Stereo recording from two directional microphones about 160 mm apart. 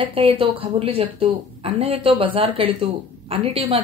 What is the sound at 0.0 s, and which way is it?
Speech, 35° right (ahead or behind).